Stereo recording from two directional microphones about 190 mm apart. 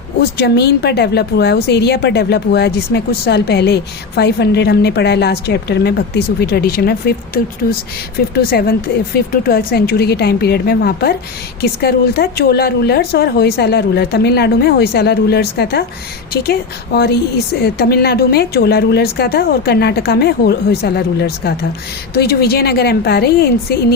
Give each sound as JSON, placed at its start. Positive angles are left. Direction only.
{"t": 0.2, "sound": "a woman's voice", "side_deg": 60}